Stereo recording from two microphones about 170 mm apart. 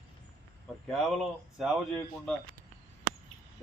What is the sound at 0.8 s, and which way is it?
Speech, centre (ahead or behind).